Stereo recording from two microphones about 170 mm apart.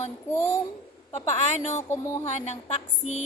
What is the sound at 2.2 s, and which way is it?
A woman's voice, 40° left (ahead or behind).